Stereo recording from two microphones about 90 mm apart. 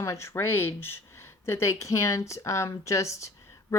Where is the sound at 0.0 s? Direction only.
30° left (ahead or behind).